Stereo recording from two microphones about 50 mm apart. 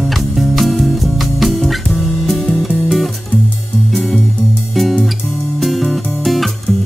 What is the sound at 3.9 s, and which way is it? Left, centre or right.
Music, centre.